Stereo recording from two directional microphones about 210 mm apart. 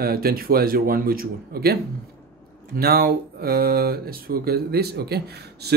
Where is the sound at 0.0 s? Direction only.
45° right (ahead or behind).